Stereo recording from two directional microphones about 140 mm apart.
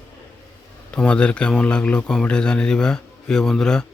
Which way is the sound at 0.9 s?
5° left (ahead or behind).